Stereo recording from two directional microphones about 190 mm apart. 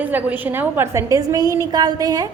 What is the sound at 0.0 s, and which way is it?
A woman's voice, 10° right (ahead or behind).